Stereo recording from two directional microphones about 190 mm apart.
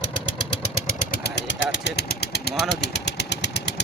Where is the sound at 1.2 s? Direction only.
70° left (ahead or behind).